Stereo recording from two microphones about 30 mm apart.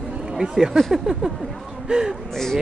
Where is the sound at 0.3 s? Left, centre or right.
Centre.